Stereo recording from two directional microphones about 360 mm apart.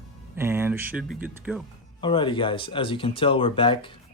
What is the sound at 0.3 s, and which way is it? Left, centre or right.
Speech, centre.